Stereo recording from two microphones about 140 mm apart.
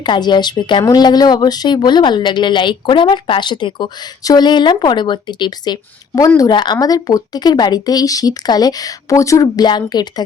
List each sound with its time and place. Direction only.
0.0 s speech: 30° left (ahead or behind)